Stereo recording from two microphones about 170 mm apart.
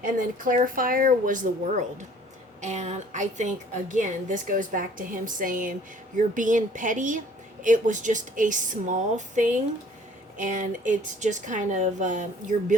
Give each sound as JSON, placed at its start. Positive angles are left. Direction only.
{"t": 0.3, "sound": "a woman's voice", "side_deg": -55}